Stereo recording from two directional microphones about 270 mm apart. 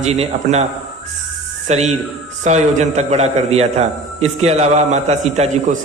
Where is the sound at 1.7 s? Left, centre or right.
Right.